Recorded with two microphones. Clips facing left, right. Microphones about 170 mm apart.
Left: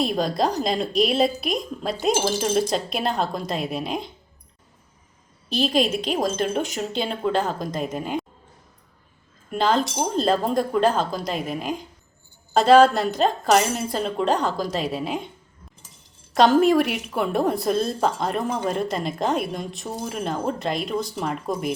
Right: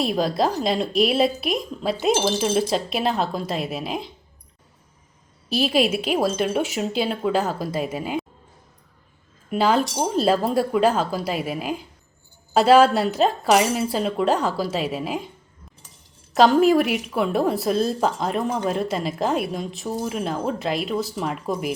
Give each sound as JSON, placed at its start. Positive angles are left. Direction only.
{"t": 0.0, "sound": "a woman's voice", "side_deg": 0}
{"t": 5.5, "sound": "a woman's voice", "side_deg": -5}
{"t": 9.5, "sound": "a woman's voice", "side_deg": -10}
{"t": 16.3, "sound": "a woman's voice", "side_deg": 0}